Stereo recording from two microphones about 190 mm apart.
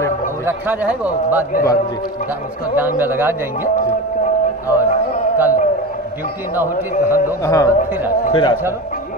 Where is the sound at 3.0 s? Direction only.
10° right (ahead or behind).